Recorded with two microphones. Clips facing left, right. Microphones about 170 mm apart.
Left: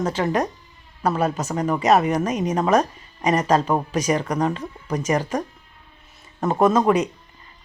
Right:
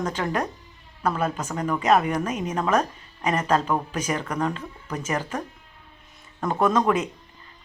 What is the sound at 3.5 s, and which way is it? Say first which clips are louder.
Speech: left 2 dB; 30° left (ahead or behind).